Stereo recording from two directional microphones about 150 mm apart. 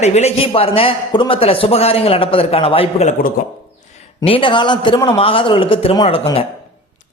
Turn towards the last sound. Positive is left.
turn(degrees=35)  # may be behind; listen again after turning